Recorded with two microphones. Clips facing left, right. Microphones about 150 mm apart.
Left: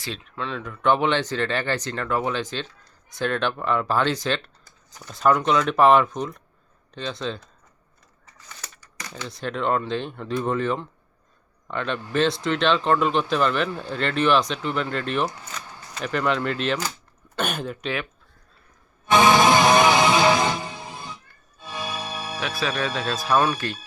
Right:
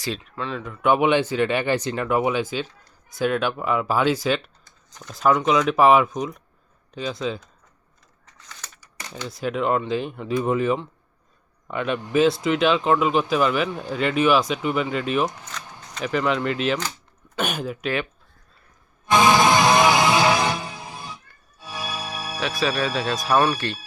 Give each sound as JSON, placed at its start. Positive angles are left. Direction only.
{"t": 0.0, "sound": "speech", "side_deg": 0}
{"t": 4.6, "sound": "speech", "side_deg": 5}
{"t": 8.4, "sound": "a sound", "side_deg": 5}
{"t": 9.2, "sound": "speech", "side_deg": -5}
{"t": 15.8, "sound": "single-lens reflex camera", "side_deg": 5}
{"t": 16.0, "sound": "speech", "side_deg": -5}
{"t": 19.3, "sound": "music", "side_deg": 20}
{"t": 19.7, "sound": "music", "side_deg": -15}
{"t": 22.4, "sound": "speech", "side_deg": 0}
{"t": 23.1, "sound": "speech", "side_deg": -10}